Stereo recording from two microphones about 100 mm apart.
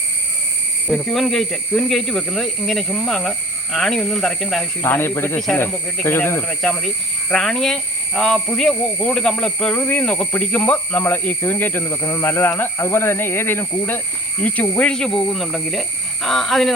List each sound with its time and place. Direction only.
0.9 s speech: 5° left (ahead or behind)
4.8 s speech: 20° left (ahead or behind)
6.5 s speech: 5° left (ahead or behind)